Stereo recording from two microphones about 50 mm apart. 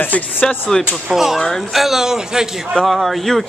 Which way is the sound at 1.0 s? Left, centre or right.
Centre.